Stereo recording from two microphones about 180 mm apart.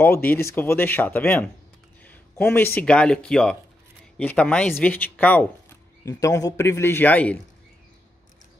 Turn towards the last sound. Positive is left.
turn(degrees=10)  # may be behind; listen again after turning